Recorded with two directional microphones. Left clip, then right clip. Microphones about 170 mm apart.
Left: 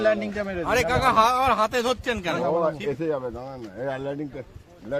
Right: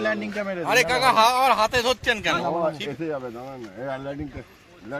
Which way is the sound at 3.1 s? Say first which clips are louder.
Left 2 dB; 40° left (ahead or behind).